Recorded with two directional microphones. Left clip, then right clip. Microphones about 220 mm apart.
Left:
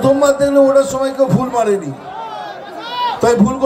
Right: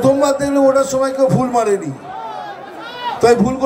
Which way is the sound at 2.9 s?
40° left (ahead or behind).